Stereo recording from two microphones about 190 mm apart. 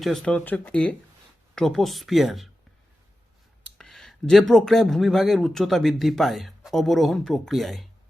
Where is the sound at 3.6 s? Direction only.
Centre (ahead or behind).